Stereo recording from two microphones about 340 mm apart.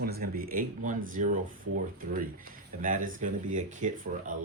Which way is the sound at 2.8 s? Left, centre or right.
Right.